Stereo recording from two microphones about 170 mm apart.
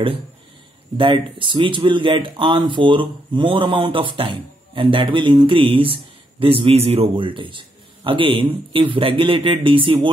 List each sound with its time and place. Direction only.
0.9 s a man's voice: 30° right (ahead or behind)